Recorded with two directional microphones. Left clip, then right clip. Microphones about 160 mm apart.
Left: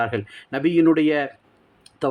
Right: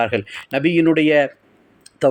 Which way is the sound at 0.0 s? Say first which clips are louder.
Right 5 dB; 10° right (ahead or behind).